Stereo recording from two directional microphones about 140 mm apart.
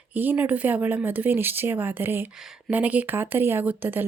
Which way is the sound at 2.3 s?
5° right (ahead or behind).